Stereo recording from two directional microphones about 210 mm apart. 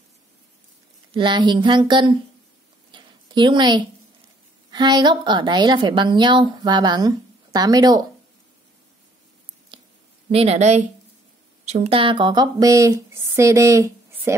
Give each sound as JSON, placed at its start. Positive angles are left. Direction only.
{"t": 1.1, "sound": "a woman's voice", "side_deg": -20}
{"t": 2.9, "sound": "a sound", "side_deg": -20}
{"t": 4.6, "sound": "a woman's voice", "side_deg": -20}
{"t": 10.3, "sound": "speech", "side_deg": -30}